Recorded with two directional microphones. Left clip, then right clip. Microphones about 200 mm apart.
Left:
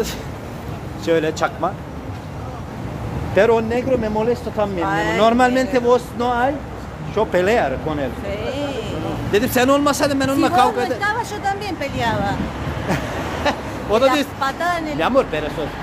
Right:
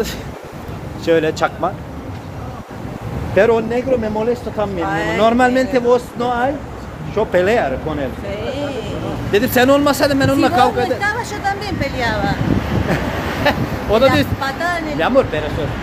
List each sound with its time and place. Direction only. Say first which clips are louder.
1.0 s speech: right 3 dB; 5° right (ahead or behind)
3.3 s speech: right 2 dB; 5° left (ahead or behind)
8.3 s speech: right 1 dB; 20° left (ahead or behind)
9.3 s speech: right 3 dB; centre (ahead or behind)
11.0 s speech: right 2 dB; 25° left (ahead or behind)
12.9 s vehicle: right 1 dB; centre (ahead or behind)
14.4 s speech: right 1 dB; 20° left (ahead or behind)
15.0 s speech: right 4 dB; 5° left (ahead or behind)